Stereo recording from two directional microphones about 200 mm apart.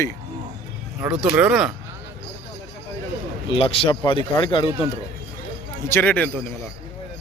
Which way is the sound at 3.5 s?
25° left (ahead or behind).